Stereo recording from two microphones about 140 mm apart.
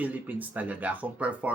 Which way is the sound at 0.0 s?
10° right (ahead or behind).